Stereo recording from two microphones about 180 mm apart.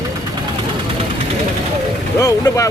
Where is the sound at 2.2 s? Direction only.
20° left (ahead or behind).